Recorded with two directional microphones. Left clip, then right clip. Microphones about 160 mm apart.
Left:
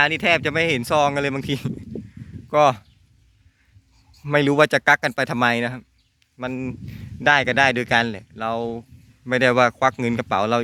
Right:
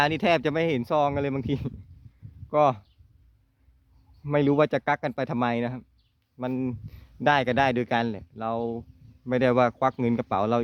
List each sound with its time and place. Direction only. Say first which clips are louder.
0.0 s speech: left 4 dB; 30° right (ahead or behind); by 2.8 s centre (ahead or behind)
4.2 s speech: left 5 dB; centre (ahead or behind)
6.3 s speech: left 2 dB; 20° right (ahead or behind)